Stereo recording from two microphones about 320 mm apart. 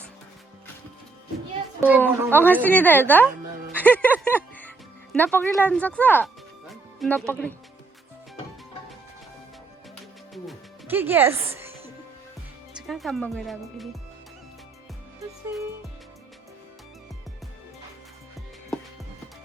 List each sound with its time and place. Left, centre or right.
2.0 s speech: centre
4.1 s music: centre
5.1 s speech: centre
10.3 s music: centre
12.9 s speech: centre